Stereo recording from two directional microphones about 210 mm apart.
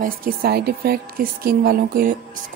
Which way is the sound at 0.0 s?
45° right (ahead or behind).